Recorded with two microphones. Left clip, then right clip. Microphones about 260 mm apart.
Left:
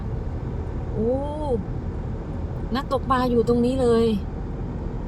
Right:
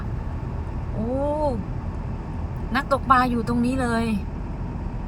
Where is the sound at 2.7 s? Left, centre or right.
Right.